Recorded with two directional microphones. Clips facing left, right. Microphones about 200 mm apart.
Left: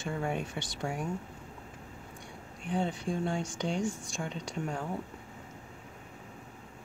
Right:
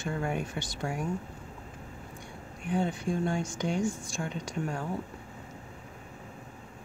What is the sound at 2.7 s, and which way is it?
Speech, 25° left (ahead or behind).